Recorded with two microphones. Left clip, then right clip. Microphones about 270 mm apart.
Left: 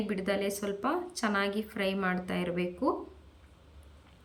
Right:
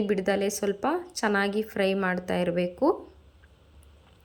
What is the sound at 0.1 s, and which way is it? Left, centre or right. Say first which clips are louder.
A woman's voice: right 4 dB; centre.